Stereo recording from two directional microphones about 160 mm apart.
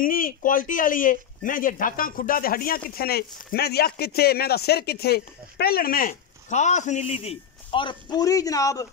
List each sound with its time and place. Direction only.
0.0 s speech: 60° left (ahead or behind); by 8.8 s 20° left (ahead or behind)